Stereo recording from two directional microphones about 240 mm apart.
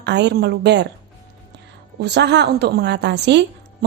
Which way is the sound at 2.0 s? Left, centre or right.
Right.